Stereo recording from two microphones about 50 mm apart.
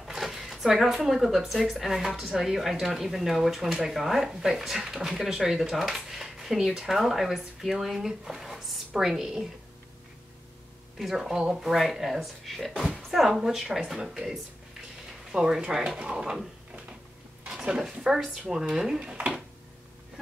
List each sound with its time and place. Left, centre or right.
0.0 s speech: centre
11.0 s speech: centre
17.5 s speech: centre
19.1 s speech: right